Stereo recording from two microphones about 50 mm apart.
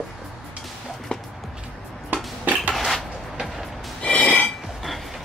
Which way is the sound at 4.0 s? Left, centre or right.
Left.